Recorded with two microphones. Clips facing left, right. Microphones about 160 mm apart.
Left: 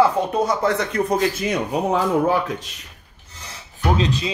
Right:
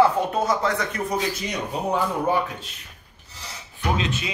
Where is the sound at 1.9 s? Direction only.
90° left.